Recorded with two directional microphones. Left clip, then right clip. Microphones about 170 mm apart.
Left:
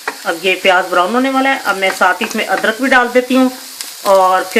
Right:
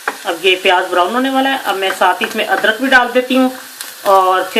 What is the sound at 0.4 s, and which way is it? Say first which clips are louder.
Speech: even; 55° left (ahead or behind).